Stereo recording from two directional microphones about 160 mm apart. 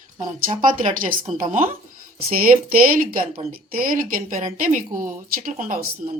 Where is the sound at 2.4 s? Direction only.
65° right (ahead or behind).